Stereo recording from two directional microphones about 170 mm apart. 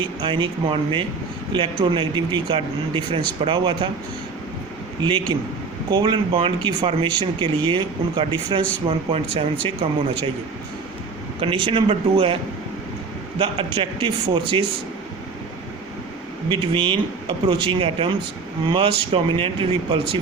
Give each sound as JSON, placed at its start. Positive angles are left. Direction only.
{"t": 0.0, "sound": "speech", "side_deg": -30}
{"t": 4.9, "sound": "speech", "side_deg": -25}
{"t": 11.3, "sound": "speech", "side_deg": -30}
{"t": 13.4, "sound": "speech", "side_deg": -30}
{"t": 16.5, "sound": "speech", "side_deg": -30}